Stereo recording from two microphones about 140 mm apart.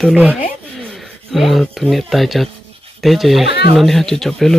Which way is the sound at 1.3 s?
Centre (ahead or behind).